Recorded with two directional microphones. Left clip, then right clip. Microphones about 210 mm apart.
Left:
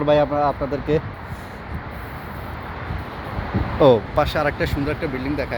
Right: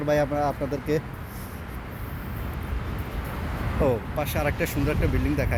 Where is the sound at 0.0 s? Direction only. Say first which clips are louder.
Left 6 dB; 15° left (ahead or behind).